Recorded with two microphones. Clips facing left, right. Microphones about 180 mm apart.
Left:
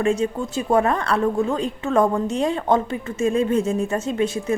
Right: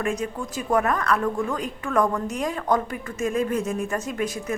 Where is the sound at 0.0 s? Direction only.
25° left (ahead or behind).